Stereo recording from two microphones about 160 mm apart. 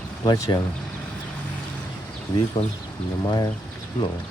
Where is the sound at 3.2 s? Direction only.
25° left (ahead or behind).